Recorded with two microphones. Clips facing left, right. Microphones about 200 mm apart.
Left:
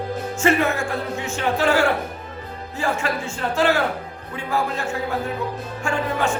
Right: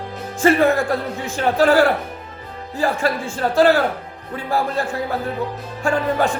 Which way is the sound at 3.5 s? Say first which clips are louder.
Right 5 dB; 35° right (ahead or behind).